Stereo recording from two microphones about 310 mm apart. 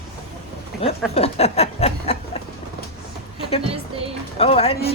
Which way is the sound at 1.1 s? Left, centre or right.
Centre.